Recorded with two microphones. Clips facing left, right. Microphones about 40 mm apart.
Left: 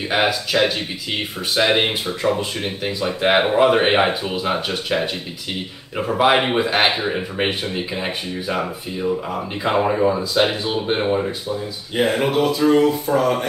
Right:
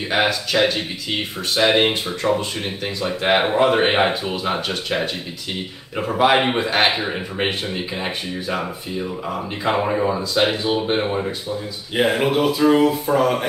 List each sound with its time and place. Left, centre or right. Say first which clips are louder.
0.1 s speech: even; centre
9.7 s speech: left 2 dB; centre